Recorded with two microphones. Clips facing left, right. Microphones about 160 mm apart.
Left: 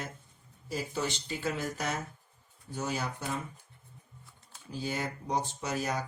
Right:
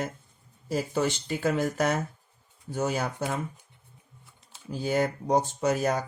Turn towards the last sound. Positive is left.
turn(degrees=-50)  # may be behind; listen again after turning